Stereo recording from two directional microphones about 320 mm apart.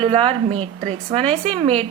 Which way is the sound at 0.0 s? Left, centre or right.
Centre.